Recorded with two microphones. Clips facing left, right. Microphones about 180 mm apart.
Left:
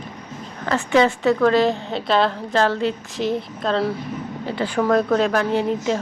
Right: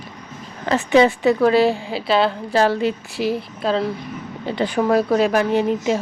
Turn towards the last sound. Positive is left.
turn(degrees=-15)  # may be behind; listen again after turning